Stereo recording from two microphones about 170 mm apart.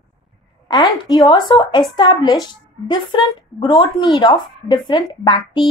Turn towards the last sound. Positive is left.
turn(degrees=25)  # may be behind; listen again after turning